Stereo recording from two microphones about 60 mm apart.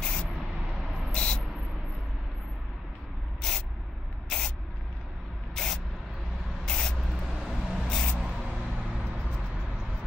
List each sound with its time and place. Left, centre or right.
0.0 s vehicle: centre
1.1 s a sound: centre
3.3 s spray: centre
5.5 s spray: centre
7.0 s spray: centre
7.4 s vehicle: centre
7.9 s a sound: centre
8.2 s a sound: centre
8.5 s vehicle: centre